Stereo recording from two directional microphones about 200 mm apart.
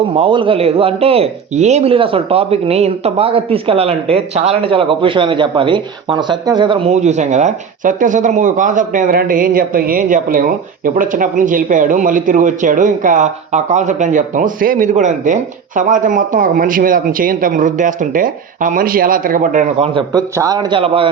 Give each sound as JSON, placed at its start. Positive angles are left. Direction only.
{"t": 0.2, "sound": "speech", "side_deg": -25}
{"t": 19.9, "sound": "a man's voice", "side_deg": -25}